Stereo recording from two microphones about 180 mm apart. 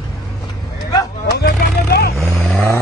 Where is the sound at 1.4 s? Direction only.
60° left (ahead or behind).